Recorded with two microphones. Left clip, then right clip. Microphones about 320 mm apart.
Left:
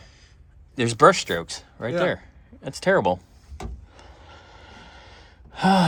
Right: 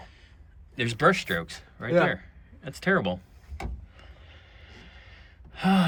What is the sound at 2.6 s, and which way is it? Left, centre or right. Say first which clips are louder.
Speech: left 6 dB; centre.